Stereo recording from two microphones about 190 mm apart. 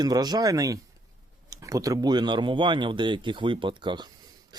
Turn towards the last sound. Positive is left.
turn(degrees=-25)  # may be behind; listen again after turning